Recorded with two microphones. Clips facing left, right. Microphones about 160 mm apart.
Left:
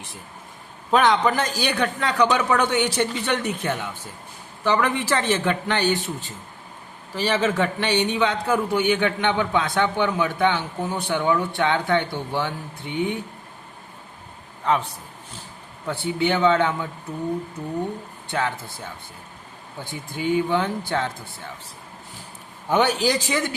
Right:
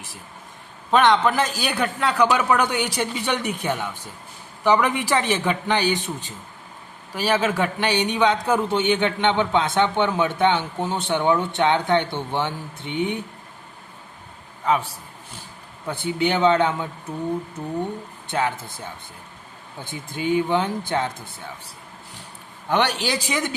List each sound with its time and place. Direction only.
0.9 s a man's voice: centre (ahead or behind); by 13.2 s 20° right (ahead or behind)
15.9 s a man's voice: 20° right (ahead or behind)
18.3 s speech: 20° right (ahead or behind)
19.8 s a man's voice: 20° right (ahead or behind)
22.7 s a man's voice: centre (ahead or behind)
23.2 s a man's voice: 15° right (ahead or behind)